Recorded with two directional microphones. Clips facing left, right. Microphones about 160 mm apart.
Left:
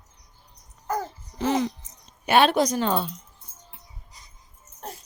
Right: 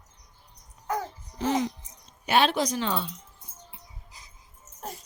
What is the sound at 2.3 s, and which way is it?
Speech, 55° left (ahead or behind).